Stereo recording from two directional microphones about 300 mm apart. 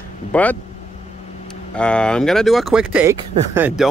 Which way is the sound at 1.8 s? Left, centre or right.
Centre.